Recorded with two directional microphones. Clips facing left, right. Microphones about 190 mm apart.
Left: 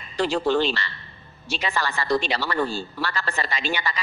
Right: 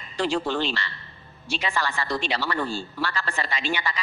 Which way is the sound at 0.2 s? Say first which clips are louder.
Left 4 dB; 40° left (ahead or behind).